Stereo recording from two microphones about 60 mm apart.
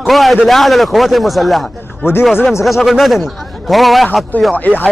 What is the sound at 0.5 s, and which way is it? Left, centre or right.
A man's voice, centre.